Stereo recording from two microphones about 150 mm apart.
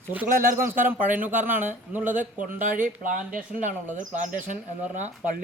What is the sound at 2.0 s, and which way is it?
Speech, 60° right (ahead or behind).